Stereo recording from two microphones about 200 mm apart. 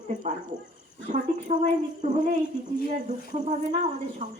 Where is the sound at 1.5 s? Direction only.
35° right (ahead or behind).